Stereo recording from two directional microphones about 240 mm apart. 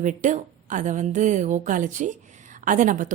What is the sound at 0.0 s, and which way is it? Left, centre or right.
A woman's voice, right.